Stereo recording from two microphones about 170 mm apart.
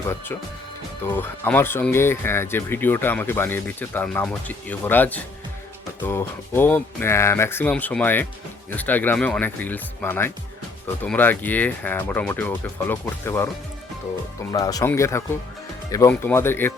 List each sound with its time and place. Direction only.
1.0 s speech: 10° left (ahead or behind)
14.5 s speech: 20° left (ahead or behind)